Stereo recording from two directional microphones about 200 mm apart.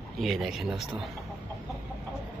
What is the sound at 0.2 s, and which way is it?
Speech, centre (ahead or behind).